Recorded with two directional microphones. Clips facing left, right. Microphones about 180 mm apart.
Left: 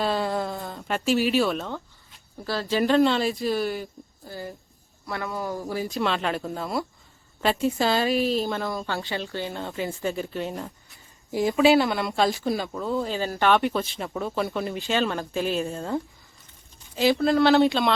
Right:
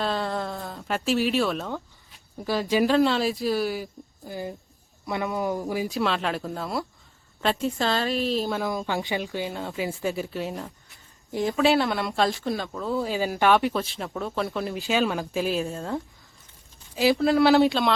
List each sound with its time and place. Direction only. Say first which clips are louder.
0.0 s a sound: left 2 dB; 5° left (ahead or behind)
2.4 s speech: right 2 dB; 15° right (ahead or behind)
2.8 s speech: left 3 dB; centre (ahead or behind)
4.3 s speech: right 3 dB; 20° right (ahead or behind)
5.9 s speech: even; centre (ahead or behind)
8.9 s speech: right 2 dB; 15° right (ahead or behind); by 17.9 s centre (ahead or behind)